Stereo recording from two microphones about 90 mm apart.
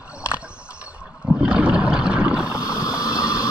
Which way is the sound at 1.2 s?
10° right (ahead or behind).